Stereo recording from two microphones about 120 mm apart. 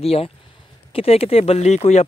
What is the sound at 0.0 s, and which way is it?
Speech, 55° left (ahead or behind).